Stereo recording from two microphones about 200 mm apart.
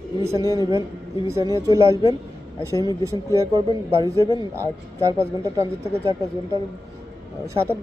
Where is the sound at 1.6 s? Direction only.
15° right (ahead or behind).